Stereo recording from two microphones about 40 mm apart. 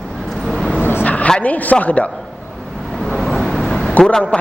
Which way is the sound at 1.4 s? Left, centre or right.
Left.